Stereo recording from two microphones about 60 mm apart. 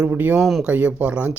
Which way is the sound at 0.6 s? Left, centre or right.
Right.